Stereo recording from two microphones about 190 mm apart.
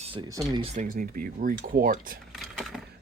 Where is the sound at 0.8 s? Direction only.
50° right (ahead or behind).